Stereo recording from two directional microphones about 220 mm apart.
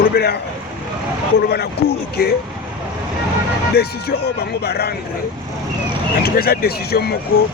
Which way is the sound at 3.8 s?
45° left (ahead or behind).